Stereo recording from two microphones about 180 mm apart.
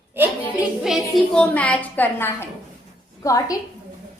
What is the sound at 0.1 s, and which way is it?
A woman's voice, 10° right (ahead or behind).